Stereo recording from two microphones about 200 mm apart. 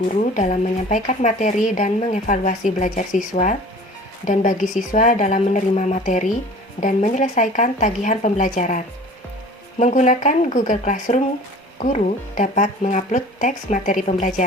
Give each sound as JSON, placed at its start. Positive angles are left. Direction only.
{"t": 0.3, "sound": "speech", "side_deg": 35}